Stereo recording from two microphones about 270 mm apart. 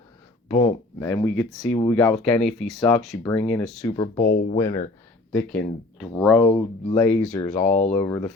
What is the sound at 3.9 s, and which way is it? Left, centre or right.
Speech, centre.